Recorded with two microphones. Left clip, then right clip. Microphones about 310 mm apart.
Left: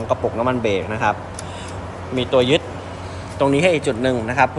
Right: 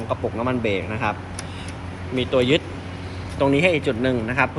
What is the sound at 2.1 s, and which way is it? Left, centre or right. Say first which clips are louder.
Speech: left 3 dB; left.